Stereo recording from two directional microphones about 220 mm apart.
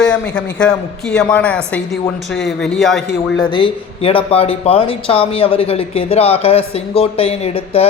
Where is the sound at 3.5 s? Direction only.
25° left (ahead or behind).